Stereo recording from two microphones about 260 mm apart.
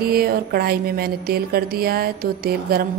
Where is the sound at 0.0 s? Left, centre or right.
Right.